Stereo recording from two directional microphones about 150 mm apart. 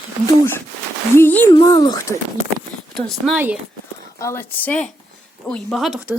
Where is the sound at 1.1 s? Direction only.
15° left (ahead or behind).